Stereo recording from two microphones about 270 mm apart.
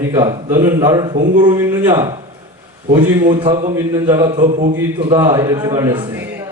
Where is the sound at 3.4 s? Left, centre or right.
Centre.